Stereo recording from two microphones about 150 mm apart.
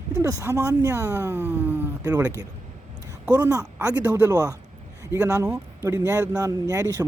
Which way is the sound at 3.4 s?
20° right (ahead or behind).